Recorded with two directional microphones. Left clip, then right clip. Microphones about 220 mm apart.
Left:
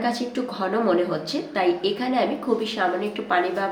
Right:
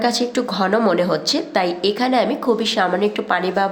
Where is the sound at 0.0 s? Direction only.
50° right (ahead or behind).